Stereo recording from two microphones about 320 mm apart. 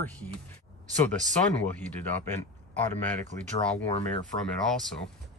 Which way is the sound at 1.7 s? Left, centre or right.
Centre.